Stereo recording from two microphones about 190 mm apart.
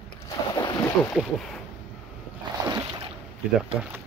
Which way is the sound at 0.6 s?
20° left (ahead or behind).